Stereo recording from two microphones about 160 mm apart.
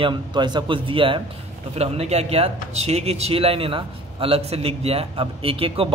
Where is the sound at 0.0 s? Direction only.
30° right (ahead or behind).